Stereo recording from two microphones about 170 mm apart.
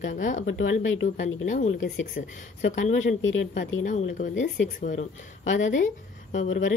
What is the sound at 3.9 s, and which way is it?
A woman's voice, 45° left (ahead or behind).